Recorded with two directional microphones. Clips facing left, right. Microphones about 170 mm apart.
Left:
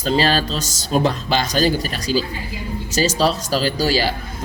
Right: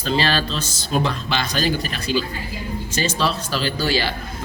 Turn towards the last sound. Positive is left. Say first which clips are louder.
# left 3 dB
turn(degrees=40)  # may be behind; listen again after turning